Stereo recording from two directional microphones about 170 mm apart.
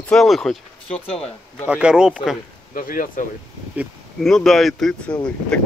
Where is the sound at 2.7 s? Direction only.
55° left (ahead or behind).